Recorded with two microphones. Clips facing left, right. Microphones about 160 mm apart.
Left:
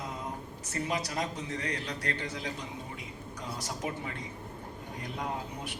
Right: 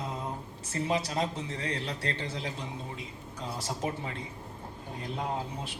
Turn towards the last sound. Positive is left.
turn(degrees=-25)  # may be behind; listen again after turning